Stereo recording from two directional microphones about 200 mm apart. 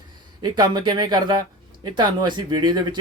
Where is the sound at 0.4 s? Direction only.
20° right (ahead or behind).